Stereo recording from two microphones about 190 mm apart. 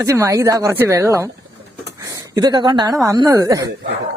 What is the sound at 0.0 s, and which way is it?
A woman's voice, 15° right (ahead or behind).